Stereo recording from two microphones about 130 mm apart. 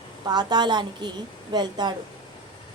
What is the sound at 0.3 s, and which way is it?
A woman's voice, 35° right (ahead or behind).